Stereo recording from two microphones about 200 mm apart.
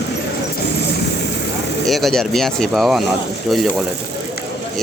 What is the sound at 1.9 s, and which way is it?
Speech, centre (ahead or behind).